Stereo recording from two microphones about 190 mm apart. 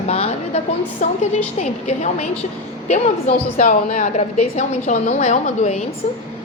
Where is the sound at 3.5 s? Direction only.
40° left (ahead or behind).